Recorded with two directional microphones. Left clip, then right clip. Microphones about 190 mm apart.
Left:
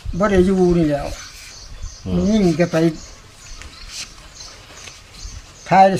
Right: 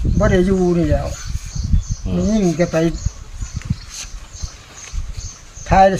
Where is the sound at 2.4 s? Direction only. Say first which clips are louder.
Even; 20° left (ahead or behind).